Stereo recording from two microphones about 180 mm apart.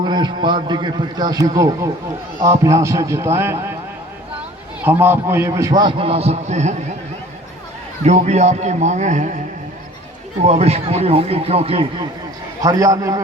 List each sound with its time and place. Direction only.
0.0 s a man's voice: 25° right (ahead or behind)
4.8 s a man's voice: 10° right (ahead or behind); by 6.7 s 40° right (ahead or behind)
8.0 s speech: 40° right (ahead or behind)
10.4 s speech: 35° right (ahead or behind)
12.5 s a man's voice: 20° right (ahead or behind)